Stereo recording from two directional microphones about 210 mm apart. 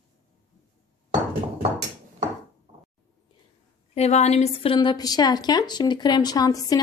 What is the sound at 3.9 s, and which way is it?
A woman's voice, 30° left (ahead or behind).